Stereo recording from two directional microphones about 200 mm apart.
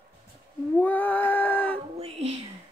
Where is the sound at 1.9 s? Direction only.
30° right (ahead or behind).